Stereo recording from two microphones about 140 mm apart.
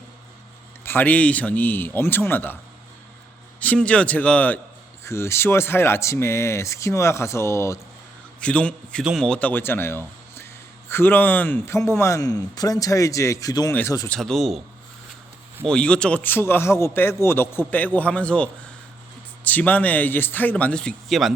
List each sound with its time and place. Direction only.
0.9 s speech: 15° left (ahead or behind)
3.6 s a man's voice: 10° left (ahead or behind)
8.4 s a man's voice: 10° left (ahead or behind); by 13.7 s 25° left (ahead or behind)
14.1 s speech: centre (ahead or behind)
15.6 s speech: 5° left (ahead or behind)
19.5 s speech: 10° left (ahead or behind)